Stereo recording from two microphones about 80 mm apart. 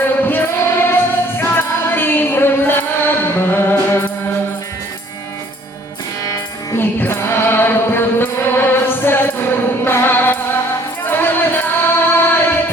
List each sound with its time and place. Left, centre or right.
0.3 s music: left
6.7 s music: left